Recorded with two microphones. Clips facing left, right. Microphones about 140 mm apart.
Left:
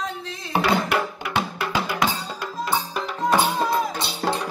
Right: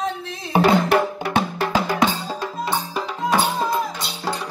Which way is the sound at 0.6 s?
40° right (ahead or behind).